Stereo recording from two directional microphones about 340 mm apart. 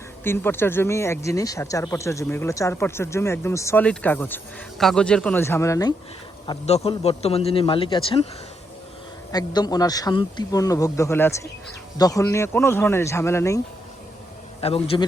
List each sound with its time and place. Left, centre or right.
0.3 s speech: centre
9.3 s speech: centre
14.6 s speech: centre